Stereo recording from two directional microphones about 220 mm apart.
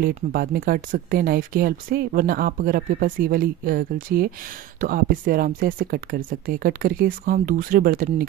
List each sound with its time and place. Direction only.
0.0 s speech: 40° right (ahead or behind)